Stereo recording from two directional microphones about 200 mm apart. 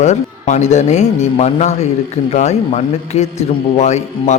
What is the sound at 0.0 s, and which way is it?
A man's voice, 35° left (ahead or behind).